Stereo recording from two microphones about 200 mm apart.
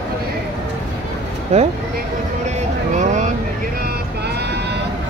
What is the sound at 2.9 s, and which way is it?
Vehicle, 35° right (ahead or behind).